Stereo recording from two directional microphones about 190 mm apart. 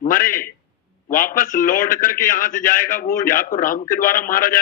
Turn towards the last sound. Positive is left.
turn(degrees=50)  # may be behind; listen again after turning